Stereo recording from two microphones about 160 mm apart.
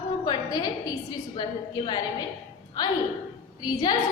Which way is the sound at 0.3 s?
25° left (ahead or behind).